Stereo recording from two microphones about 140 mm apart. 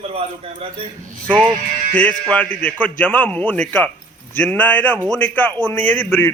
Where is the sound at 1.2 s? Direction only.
10° left (ahead or behind).